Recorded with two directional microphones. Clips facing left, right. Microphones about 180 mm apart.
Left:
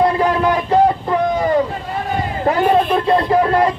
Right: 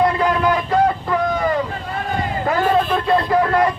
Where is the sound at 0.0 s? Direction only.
30° left (ahead or behind).